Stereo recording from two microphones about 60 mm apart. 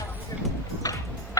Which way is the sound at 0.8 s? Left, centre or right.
Left.